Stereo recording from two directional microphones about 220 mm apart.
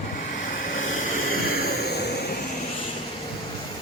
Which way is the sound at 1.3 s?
45° left (ahead or behind).